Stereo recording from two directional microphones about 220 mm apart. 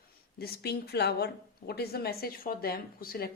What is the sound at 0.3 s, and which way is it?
A woman's voice, 45° left (ahead or behind).